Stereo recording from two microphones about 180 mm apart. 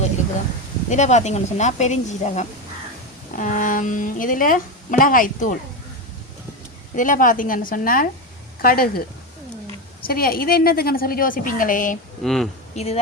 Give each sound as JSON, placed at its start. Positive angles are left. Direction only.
{"t": 0.9, "sound": "a woman's voice", "side_deg": 40}
{"t": 6.9, "sound": "a woman's voice", "side_deg": 45}
{"t": 10.0, "sound": "a woman's voice", "side_deg": 55}
{"t": 12.2, "sound": "speech", "side_deg": 0}
{"t": 12.7, "sound": "speech", "side_deg": 35}